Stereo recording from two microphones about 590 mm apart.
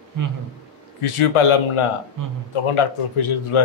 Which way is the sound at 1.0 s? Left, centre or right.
Left.